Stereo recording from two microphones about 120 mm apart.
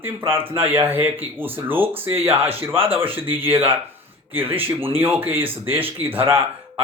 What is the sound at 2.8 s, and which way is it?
Speech, 50° right (ahead or behind).